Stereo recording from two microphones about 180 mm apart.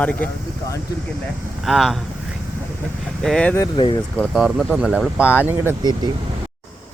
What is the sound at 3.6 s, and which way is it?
Speech, 25° left (ahead or behind).